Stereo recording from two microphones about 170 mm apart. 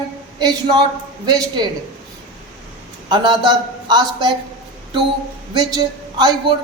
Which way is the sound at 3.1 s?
25° right (ahead or behind).